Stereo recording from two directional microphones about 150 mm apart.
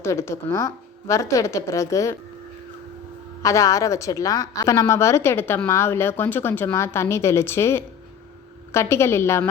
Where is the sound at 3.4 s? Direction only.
20° left (ahead or behind).